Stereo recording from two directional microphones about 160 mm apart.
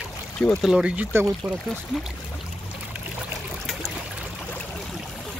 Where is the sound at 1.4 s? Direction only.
Centre (ahead or behind).